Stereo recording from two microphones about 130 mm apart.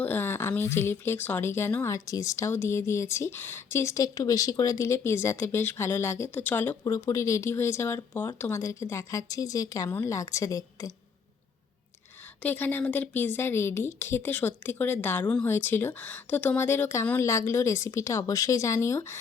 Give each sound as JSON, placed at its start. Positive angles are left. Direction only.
{"t": 0.0, "sound": "speech", "side_deg": 15}
{"t": 12.4, "sound": "speech", "side_deg": 15}